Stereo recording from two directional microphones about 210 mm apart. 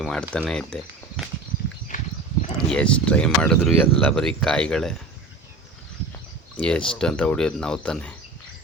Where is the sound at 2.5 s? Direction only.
5° left (ahead or behind).